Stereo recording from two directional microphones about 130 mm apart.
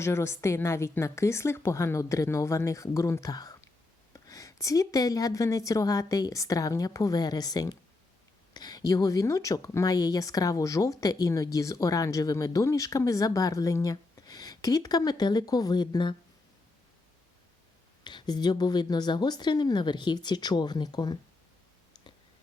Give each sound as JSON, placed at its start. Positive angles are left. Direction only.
{"t": 0.0, "sound": "speech", "side_deg": 20}
{"t": 18.0, "sound": "speech", "side_deg": 35}